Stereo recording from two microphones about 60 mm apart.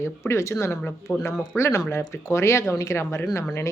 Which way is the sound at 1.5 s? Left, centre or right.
Left.